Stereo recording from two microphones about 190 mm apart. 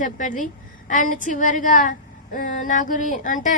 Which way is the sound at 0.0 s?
45° left (ahead or behind).